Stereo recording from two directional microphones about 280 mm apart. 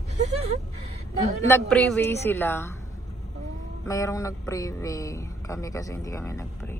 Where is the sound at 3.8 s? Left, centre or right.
Centre.